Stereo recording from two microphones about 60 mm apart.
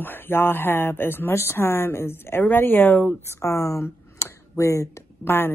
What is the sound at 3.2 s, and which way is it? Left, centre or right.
Speech, left.